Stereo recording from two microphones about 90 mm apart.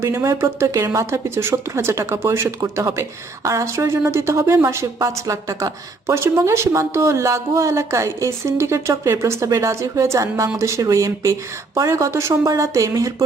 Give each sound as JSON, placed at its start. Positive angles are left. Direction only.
{"t": 0.0, "sound": "speech", "side_deg": -35}